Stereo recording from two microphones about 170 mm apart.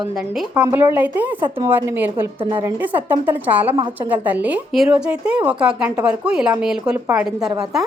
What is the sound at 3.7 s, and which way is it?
Speech, 25° right (ahead or behind).